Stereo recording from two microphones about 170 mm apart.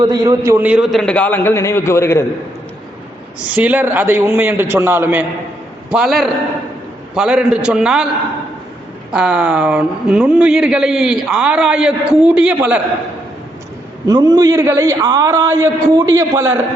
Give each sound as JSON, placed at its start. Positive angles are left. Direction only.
{"t": 0.0, "sound": "a man's voice", "side_deg": -20}
{"t": 3.5, "sound": "a man's voice", "side_deg": -10}
{"t": 5.9, "sound": "speech", "side_deg": 0}
{"t": 9.1, "sound": "speech", "side_deg": -5}
{"t": 14.1, "sound": "a man's voice", "side_deg": -20}